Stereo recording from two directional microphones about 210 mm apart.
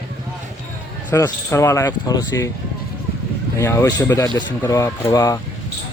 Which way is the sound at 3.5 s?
15° left (ahead or behind).